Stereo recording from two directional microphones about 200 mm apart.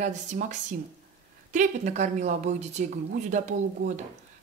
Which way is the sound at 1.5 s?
35° right (ahead or behind).